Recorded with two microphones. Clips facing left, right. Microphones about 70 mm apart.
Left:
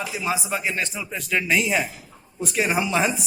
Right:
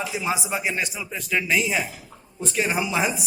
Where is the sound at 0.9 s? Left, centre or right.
Centre.